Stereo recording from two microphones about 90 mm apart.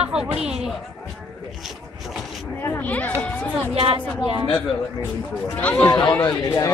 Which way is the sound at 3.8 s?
75° right (ahead or behind).